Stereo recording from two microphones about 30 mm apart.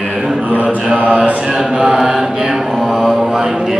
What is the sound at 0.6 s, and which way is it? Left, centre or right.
Mantra, right.